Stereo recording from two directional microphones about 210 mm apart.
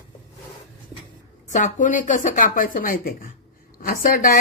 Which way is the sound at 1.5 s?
35° left (ahead or behind).